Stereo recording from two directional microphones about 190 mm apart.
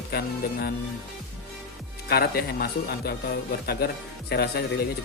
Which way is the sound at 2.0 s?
55° left (ahead or behind).